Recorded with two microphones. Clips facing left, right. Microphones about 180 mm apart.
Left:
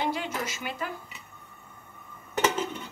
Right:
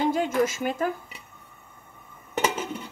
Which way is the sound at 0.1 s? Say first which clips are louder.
Right 9 dB; 45° right (ahead or behind).